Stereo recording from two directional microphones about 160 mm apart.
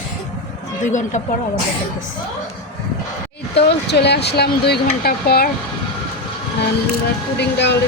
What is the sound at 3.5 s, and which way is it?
Speech, 90° left.